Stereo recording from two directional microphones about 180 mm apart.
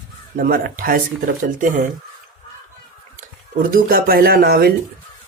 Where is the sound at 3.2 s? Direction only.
50° right (ahead or behind).